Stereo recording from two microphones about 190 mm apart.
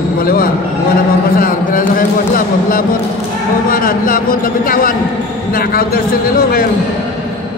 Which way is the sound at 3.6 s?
50° left (ahead or behind).